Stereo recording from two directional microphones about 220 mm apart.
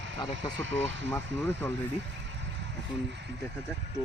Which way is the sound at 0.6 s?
55° right (ahead or behind).